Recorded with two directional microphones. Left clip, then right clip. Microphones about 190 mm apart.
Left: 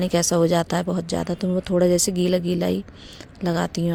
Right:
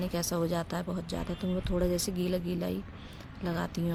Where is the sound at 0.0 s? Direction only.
45° left (ahead or behind).